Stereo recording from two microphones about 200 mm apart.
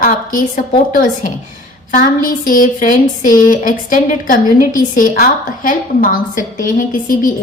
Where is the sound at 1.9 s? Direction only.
45° left (ahead or behind).